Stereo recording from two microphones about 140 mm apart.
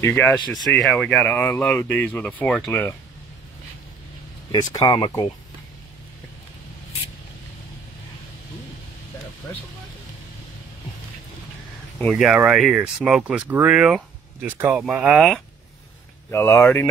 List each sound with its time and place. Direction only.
0.0 s speech: 20° left (ahead or behind)
0.7 s speech: 5° left (ahead or behind)
4.5 s speech: 30° left (ahead or behind)
12.1 s speech: 5° right (ahead or behind)
16.3 s speech: 20° left (ahead or behind)